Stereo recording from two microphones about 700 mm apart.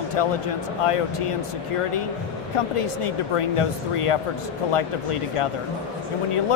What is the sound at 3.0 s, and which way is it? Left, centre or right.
Speech, left.